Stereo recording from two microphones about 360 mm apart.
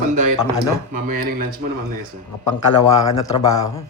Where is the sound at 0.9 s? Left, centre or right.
Right.